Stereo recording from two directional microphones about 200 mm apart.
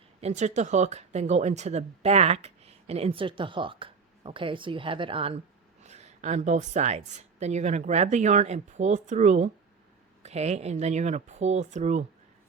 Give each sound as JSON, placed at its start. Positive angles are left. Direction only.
{"t": 0.2, "sound": "speech", "side_deg": -35}